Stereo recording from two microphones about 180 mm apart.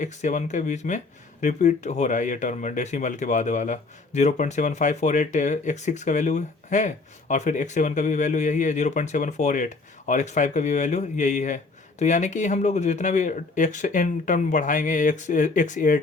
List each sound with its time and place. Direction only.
0.0 s speech: 40° left (ahead or behind)